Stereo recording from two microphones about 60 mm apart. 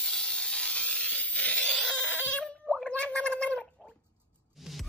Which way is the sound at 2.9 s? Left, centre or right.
Centre.